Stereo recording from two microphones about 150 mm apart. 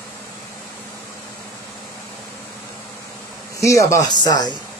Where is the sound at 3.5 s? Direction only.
20° left (ahead or behind).